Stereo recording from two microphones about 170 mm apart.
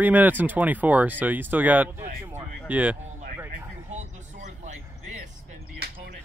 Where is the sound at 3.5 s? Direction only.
45° right (ahead or behind).